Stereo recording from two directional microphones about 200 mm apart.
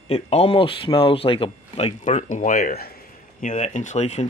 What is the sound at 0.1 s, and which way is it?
Speech, 30° left (ahead or behind).